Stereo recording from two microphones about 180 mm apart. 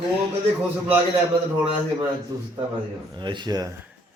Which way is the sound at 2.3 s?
15° right (ahead or behind).